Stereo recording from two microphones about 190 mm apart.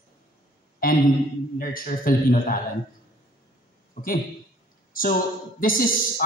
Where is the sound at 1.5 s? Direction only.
50° left (ahead or behind).